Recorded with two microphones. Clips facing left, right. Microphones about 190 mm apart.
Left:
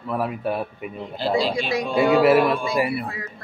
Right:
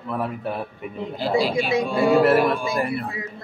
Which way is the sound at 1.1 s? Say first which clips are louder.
Even; 10° right (ahead or behind).